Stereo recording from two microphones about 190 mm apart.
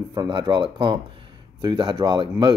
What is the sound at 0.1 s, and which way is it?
Speech, 20° right (ahead or behind).